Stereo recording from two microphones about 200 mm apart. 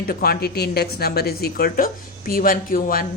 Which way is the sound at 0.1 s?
50° left (ahead or behind).